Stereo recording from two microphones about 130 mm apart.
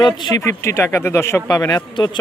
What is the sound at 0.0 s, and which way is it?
A man's voice, 25° left (ahead or behind).